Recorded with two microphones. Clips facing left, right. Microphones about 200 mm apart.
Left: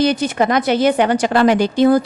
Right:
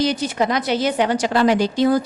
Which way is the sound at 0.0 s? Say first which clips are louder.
Left 4 dB; 60° left (ahead or behind).